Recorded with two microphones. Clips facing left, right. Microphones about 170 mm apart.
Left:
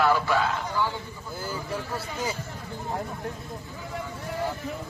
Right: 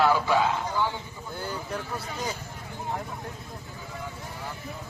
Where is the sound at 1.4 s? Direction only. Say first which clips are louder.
Left 1 dB; 5° left (ahead or behind).